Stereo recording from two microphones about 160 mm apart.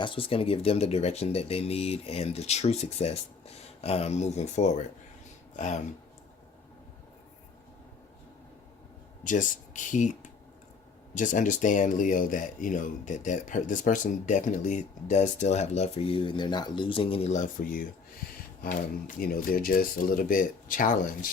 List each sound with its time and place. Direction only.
0.0 s speech: 35° left (ahead or behind); by 5.8 s 50° left (ahead or behind)
9.2 s speech: 55° left (ahead or behind)